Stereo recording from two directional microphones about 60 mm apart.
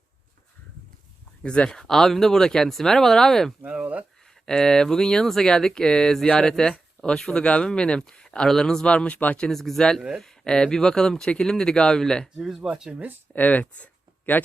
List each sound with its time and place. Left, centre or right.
1.4 s speech: centre
3.7 s speech: right
4.4 s speech: centre
9.4 s speech: centre
12.4 s speech: centre
12.9 s speech: right
13.3 s speech: left